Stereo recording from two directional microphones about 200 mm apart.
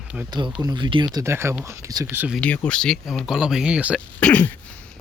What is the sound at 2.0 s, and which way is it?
Speech, 5° right (ahead or behind).